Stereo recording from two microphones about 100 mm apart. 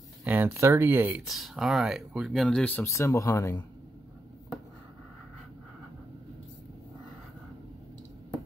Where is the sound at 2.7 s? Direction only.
30° left (ahead or behind).